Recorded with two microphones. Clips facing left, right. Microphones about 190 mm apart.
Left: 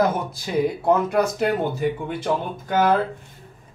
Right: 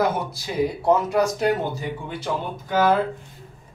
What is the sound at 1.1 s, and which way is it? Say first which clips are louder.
Speech: even; 55° left (ahead or behind).